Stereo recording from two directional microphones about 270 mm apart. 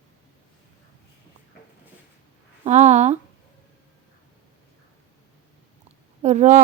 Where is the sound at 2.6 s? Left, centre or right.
Right.